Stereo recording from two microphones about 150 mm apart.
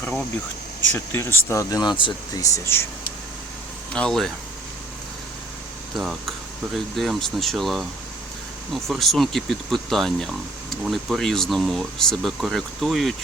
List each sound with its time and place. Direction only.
0.9 s speech: 15° left (ahead or behind)
2.4 s speech: 15° left (ahead or behind)
3.9 s speech: 5° left (ahead or behind)
5.9 s speech: centre (ahead or behind)